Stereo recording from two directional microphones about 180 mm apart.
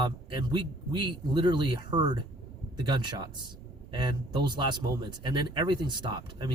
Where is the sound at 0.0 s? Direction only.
25° right (ahead or behind).